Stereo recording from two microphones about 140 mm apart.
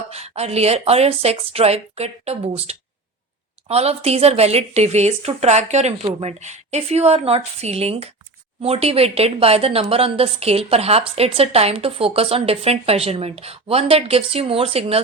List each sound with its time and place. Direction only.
0.1 s a woman's voice: 50° right (ahead or behind)